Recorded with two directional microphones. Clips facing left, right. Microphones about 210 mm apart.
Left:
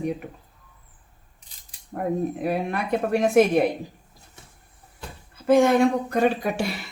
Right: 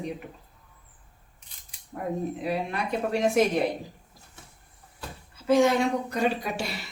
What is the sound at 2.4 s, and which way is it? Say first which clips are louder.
Speech: left 4 dB; 55° left (ahead or behind).